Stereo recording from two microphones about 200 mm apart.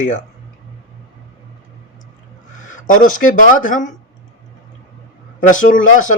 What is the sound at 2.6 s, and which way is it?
Speech, 40° left (ahead or behind).